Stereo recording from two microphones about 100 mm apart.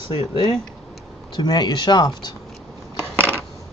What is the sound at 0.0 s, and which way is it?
Speech, 55° left (ahead or behind).